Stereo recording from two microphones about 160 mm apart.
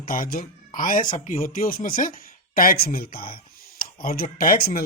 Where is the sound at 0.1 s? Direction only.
65° left (ahead or behind).